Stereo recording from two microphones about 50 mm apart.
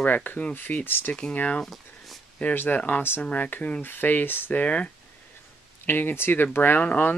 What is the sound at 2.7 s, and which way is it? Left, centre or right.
Speech, left.